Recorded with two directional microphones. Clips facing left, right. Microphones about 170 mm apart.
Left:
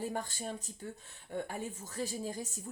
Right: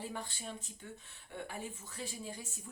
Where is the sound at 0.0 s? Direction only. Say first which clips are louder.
Left 6 dB; 45° left (ahead or behind).